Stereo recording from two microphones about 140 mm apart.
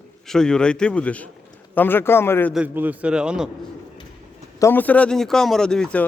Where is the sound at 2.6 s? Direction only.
10° right (ahead or behind).